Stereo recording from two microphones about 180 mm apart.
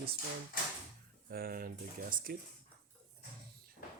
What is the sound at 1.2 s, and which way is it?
Speech, 60° right (ahead or behind).